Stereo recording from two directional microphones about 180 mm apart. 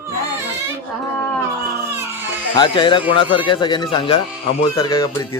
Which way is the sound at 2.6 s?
25° left (ahead or behind).